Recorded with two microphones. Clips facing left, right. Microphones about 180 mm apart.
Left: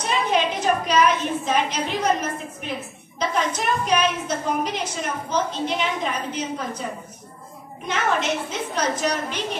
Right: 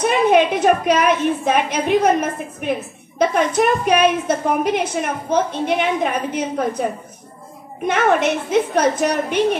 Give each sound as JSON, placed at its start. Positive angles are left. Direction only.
{"t": 0.0, "sound": "a woman's voice", "side_deg": -55}